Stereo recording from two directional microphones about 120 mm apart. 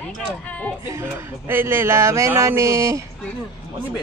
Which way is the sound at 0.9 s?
20° right (ahead or behind).